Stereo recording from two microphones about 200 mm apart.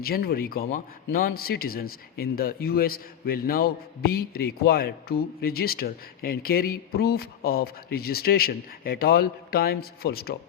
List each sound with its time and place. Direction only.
0.0 s a man's voice: 50° left (ahead or behind)